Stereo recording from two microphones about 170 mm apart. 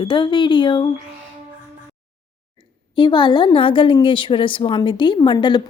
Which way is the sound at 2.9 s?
25° left (ahead or behind).